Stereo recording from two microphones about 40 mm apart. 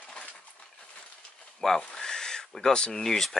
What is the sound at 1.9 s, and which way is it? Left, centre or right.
Owl, centre.